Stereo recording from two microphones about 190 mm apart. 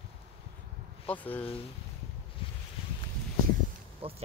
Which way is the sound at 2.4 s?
30° left (ahead or behind).